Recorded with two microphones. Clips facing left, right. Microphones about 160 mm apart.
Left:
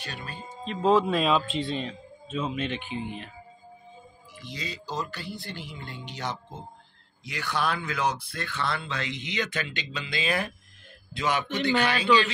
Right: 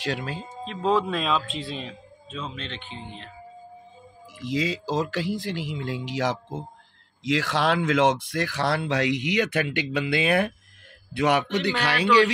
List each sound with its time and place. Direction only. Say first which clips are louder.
0.0 s speech: right 9 dB; 90° right
0.7 s speech: left 1 dB; centre (ahead or behind)
2.4 s speech: left 6 dB; 10° left (ahead or behind)
4.4 s a man's voice: right 12 dB; 90° right; by 12.3 s 75° right (ahead or behind)